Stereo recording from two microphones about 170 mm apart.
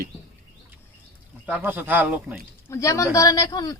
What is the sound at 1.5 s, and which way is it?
Speech, 10° right (ahead or behind).